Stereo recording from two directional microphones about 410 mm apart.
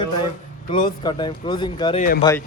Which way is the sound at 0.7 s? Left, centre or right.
Centre.